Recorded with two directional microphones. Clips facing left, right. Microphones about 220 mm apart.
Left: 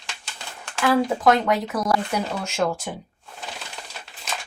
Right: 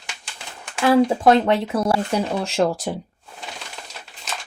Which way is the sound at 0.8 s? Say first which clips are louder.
Right 4 dB; 25° right (ahead or behind).